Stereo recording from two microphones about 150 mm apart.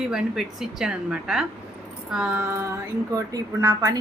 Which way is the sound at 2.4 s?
20° right (ahead or behind).